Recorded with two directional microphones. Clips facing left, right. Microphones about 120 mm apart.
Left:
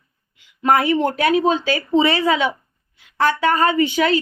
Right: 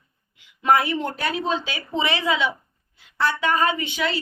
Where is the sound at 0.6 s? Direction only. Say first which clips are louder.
Left 4 dB; 50° left (ahead or behind).